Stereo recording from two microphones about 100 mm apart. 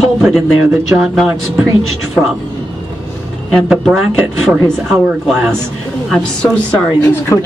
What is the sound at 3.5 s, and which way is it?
Speech, centre (ahead or behind).